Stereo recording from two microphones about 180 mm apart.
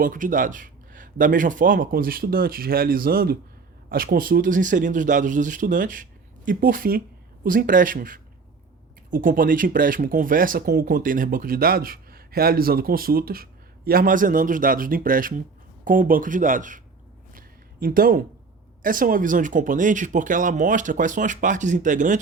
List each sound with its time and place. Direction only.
0.0 s speech: 50° right (ahead or behind)
17.3 s a sound: 50° right (ahead or behind)
18.8 s speech: 50° right (ahead or behind)